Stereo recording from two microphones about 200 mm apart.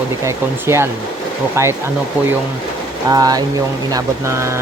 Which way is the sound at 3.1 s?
20° right (ahead or behind).